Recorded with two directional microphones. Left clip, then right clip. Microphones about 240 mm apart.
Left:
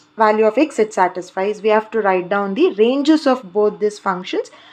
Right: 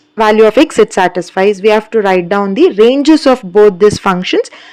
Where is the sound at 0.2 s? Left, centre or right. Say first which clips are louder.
Right 7 dB; right.